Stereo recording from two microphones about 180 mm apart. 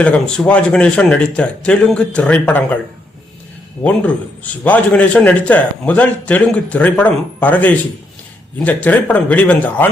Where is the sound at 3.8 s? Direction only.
10° left (ahead or behind).